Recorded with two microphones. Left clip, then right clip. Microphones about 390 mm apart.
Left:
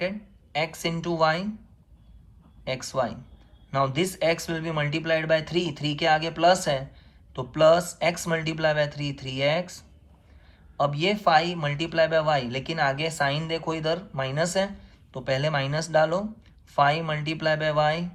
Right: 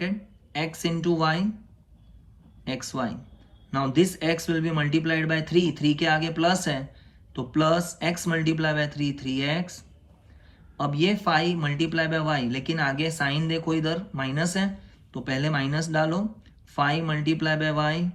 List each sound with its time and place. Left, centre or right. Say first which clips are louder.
0.5 s speech: left 1 dB; centre
2.6 s speech: left 3 dB; centre